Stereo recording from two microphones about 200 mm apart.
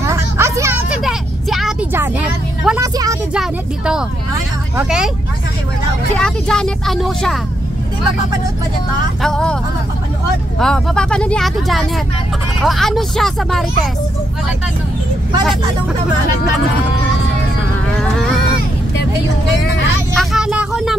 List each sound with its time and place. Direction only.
0.0 s vehicle: 15° right (ahead or behind)
2.0 s a sound: 10° right (ahead or behind)
2.8 s vehicle: 15° right (ahead or behind)
3.3 s speech: 5° right (ahead or behind)
6.1 s speech: 5° left (ahead or behind)
9.2 s speech: 5° left (ahead or behind)
10.6 s speech: 5° left (ahead or behind)
20.2 s a sound: 5° right (ahead or behind)